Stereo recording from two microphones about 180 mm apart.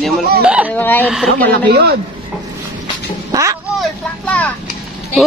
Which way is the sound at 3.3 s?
15° right (ahead or behind).